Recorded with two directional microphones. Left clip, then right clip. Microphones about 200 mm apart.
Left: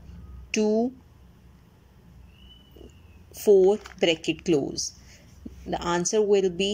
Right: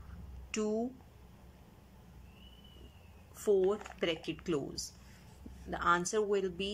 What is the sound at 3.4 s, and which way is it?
Speech, 15° left (ahead or behind).